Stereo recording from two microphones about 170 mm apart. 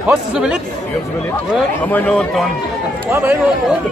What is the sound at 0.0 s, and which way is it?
Speech, 5° right (ahead or behind).